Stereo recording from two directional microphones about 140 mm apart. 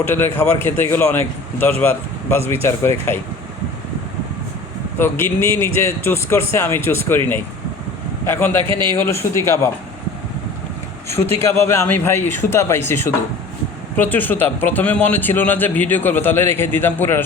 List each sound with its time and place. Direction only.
0.0 s a man's voice: 15° left (ahead or behind)
4.9 s a man's voice: 15° left (ahead or behind)
8.2 s a man's voice: 15° left (ahead or behind)
11.1 s a man's voice: 20° left (ahead or behind)